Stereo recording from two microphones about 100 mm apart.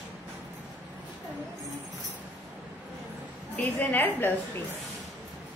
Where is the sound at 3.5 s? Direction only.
20° left (ahead or behind).